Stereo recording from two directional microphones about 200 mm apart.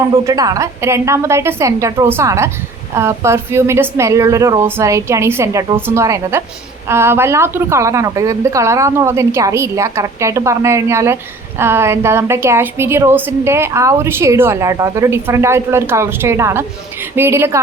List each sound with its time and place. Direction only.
0.0 s a woman's voice: 15° right (ahead or behind)